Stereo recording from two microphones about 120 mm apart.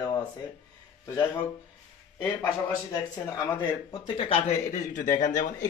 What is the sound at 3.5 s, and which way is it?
Speech, 40° left (ahead or behind).